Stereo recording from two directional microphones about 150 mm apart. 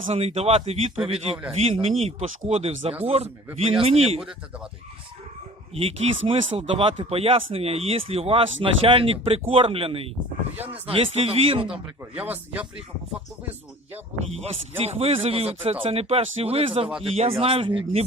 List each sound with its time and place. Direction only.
0.1 s speech: 45° right (ahead or behind)
5.7 s speech: 40° right (ahead or behind)
11.7 s speech: 10° right (ahead or behind)
14.4 s speech: 45° right (ahead or behind)